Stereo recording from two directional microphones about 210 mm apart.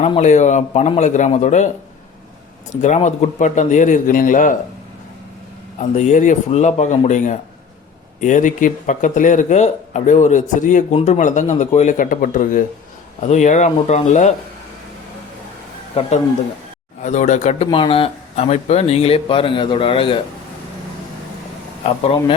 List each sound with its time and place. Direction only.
0.0 s speech: 30° left (ahead or behind)
2.8 s speech: 35° left (ahead or behind)
5.8 s speech: 35° left (ahead or behind)
17.0 s speech: 35° left (ahead or behind)